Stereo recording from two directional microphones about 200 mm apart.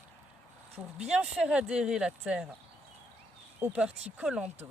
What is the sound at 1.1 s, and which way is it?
Speech, 5° right (ahead or behind).